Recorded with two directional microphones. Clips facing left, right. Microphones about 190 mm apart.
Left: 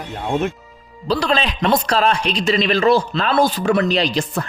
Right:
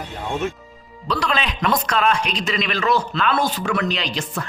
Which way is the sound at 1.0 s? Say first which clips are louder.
Left 4 dB; 30° left (ahead or behind).